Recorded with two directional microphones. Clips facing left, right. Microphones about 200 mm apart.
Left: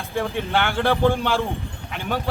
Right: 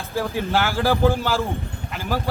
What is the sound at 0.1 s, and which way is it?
Speech, 5° right (ahead or behind).